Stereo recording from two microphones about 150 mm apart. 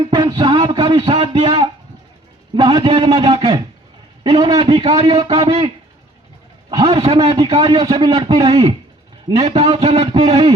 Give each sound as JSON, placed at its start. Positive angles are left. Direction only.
{"t": 0.1, "sound": "a sound", "side_deg": -25}
{"t": 2.6, "sound": "a man's voice", "side_deg": -35}
{"t": 6.7, "sound": "a man's voice", "side_deg": -25}
{"t": 7.0, "sound": "a man's voice", "side_deg": -40}